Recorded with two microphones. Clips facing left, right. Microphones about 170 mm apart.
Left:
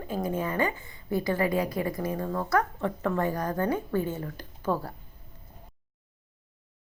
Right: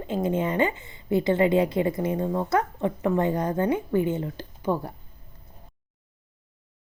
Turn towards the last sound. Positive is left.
turn(degrees=-20)  # may be behind; listen again after turning